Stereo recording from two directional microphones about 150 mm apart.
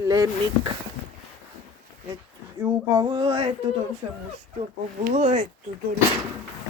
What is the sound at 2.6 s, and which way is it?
Speech, 25° right (ahead or behind).